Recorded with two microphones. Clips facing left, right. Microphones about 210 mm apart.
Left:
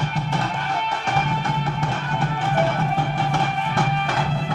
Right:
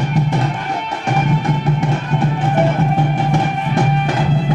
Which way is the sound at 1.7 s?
15° right (ahead or behind).